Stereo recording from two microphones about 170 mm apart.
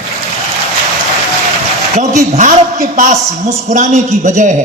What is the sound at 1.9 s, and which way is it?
A man's voice, 45° right (ahead or behind).